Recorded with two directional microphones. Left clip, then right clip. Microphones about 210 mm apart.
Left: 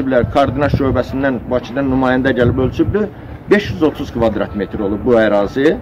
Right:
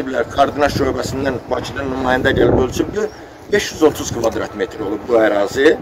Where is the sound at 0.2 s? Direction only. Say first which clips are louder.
Right 4 dB; 5° right (ahead or behind).